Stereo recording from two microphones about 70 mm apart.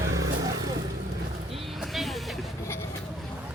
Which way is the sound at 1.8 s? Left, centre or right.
Centre.